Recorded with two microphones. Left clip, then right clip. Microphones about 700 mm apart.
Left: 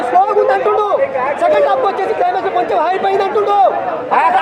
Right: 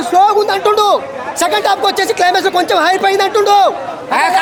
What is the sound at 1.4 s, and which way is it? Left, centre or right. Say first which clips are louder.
A man's voice: even; right.